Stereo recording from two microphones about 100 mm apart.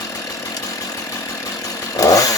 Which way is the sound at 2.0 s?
35° left (ahead or behind).